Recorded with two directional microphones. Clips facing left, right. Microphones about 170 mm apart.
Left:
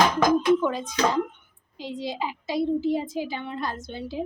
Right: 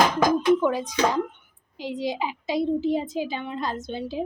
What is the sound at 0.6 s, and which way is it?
A woman's voice, 10° right (ahead or behind).